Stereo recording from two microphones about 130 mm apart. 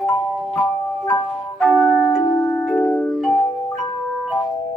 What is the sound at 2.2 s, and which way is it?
Music, 30° left (ahead or behind).